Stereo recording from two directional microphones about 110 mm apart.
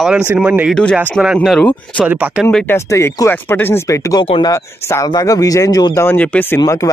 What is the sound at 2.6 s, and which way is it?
Speech, 25° left (ahead or behind).